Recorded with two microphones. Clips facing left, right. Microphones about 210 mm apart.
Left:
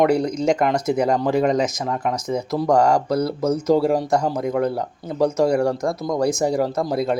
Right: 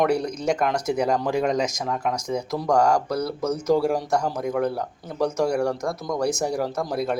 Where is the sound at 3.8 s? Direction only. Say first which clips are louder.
Left 4 dB; 5° left (ahead or behind).